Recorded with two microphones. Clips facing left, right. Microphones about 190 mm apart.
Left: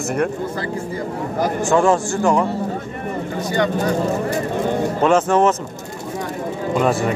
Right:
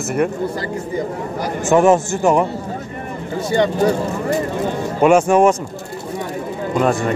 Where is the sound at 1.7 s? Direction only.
20° right (ahead or behind).